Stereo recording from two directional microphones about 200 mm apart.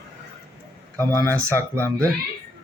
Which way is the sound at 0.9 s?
15° right (ahead or behind).